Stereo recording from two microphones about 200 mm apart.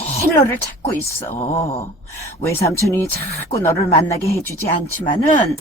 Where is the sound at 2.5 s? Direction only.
15° left (ahead or behind).